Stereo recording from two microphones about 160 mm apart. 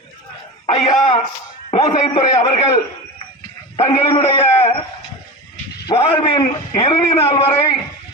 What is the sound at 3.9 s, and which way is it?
Speech, 40° left (ahead or behind).